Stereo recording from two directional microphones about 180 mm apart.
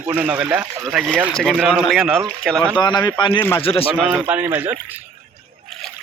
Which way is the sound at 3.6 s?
30° left (ahead or behind).